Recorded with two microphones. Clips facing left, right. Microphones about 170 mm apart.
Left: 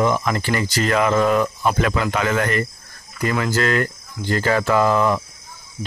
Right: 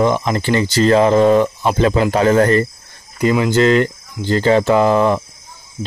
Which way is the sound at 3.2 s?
20° right (ahead or behind).